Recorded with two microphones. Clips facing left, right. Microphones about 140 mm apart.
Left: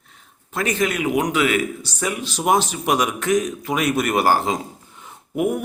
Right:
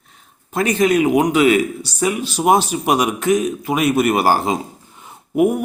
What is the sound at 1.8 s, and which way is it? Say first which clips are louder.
Speech: right 6 dB; 10° right (ahead or behind).